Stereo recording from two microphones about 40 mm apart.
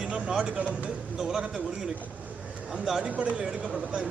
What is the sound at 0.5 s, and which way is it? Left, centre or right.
Speech, right.